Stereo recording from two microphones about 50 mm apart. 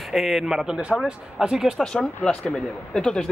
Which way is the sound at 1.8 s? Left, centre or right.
Centre.